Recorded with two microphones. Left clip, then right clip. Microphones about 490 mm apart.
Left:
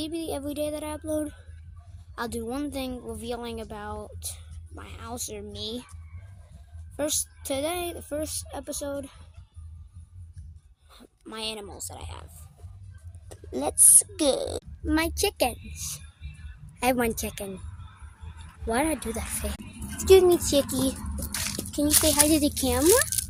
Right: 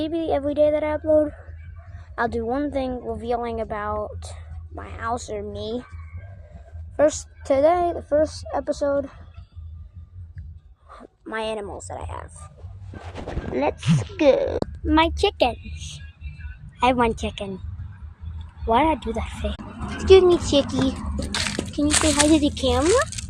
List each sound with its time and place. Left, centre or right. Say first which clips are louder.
0.0 s a woman's voice: right 9 dB; left
6.9 s a woman's voice: right 10 dB; left
10.8 s speech: right 8 dB; left
13.5 s a woman's voice: right 2 dB; left
18.6 s a woman's voice: right 8 dB; left
21.3 s a sound: right 7 dB; centre
21.8 s a child's voice: right 4 dB; centre
22.3 s a woman's voice: right 5 dB; left